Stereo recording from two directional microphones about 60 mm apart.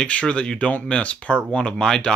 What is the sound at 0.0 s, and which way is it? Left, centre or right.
Speech, centre.